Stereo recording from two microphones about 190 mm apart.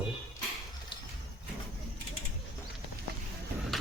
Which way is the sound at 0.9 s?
25° left (ahead or behind).